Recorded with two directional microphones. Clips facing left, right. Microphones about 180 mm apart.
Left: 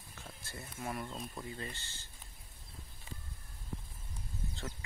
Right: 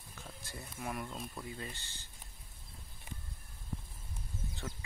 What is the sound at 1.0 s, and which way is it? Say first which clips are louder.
Speech: even; centre (ahead or behind).